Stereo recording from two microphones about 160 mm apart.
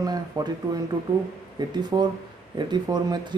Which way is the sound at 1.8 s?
25° right (ahead or behind).